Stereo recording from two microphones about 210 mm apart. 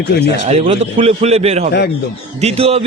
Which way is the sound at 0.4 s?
30° right (ahead or behind).